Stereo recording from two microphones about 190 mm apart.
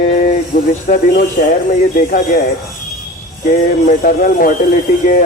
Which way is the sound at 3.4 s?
45° left (ahead or behind).